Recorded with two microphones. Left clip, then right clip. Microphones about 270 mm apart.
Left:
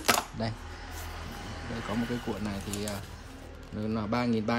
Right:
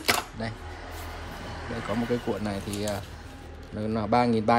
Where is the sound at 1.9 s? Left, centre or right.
Centre.